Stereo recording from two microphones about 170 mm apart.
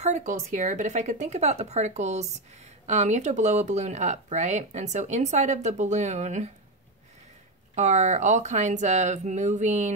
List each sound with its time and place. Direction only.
0.0 s speech: 45° right (ahead or behind)
7.7 s speech: 45° right (ahead or behind)